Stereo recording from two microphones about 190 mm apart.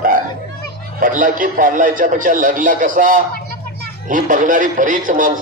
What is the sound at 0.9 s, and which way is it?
A man's voice, 45° right (ahead or behind).